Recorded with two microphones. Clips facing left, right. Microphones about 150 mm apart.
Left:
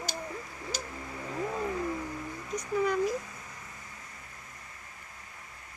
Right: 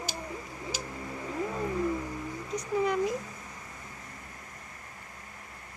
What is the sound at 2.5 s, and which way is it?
Speech, 25° right (ahead or behind).